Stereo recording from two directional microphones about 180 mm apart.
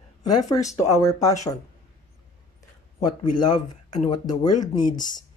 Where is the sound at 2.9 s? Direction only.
25° left (ahead or behind).